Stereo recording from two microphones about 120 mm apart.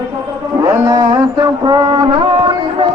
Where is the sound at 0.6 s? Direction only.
25° right (ahead or behind); by 2.8 s 45° right (ahead or behind).